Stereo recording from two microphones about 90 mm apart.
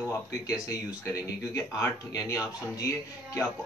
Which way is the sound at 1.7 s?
35° left (ahead or behind).